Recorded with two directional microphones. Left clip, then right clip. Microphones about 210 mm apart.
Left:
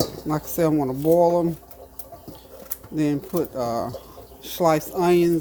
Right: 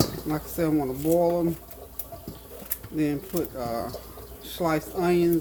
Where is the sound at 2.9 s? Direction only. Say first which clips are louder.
Left 4 dB; 40° left (ahead or behind).